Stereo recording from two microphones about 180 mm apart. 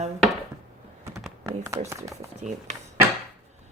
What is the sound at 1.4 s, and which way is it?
Speech, 15° right (ahead or behind).